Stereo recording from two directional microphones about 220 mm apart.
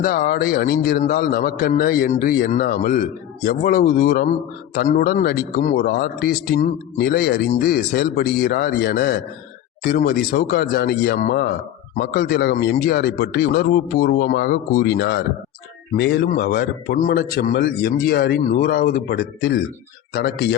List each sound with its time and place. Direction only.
0.0 s a man's voice: 40° left (ahead or behind)